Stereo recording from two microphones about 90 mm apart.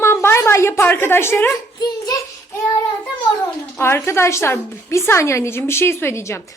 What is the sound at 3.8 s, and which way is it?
A woman's voice, 30° left (ahead or behind).